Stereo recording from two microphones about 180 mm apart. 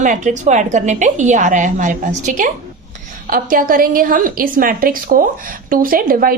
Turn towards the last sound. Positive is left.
turn(degrees=-50)  # may be behind; listen again after turning